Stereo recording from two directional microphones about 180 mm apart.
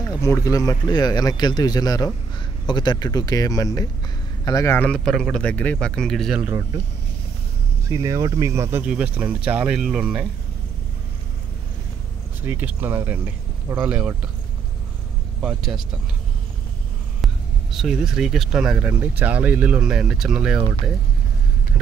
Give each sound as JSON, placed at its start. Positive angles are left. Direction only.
{"t": 0.2, "sound": "speech", "side_deg": 15}
{"t": 7.9, "sound": "speech", "side_deg": -20}
{"t": 8.7, "sound": "speech", "side_deg": -5}
{"t": 12.4, "sound": "speech", "side_deg": -10}
{"t": 15.4, "sound": "speech", "side_deg": 0}
{"t": 17.2, "sound": "speech", "side_deg": 0}